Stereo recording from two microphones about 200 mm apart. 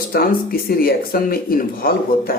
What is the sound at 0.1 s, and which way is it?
Speech, 45° left (ahead or behind).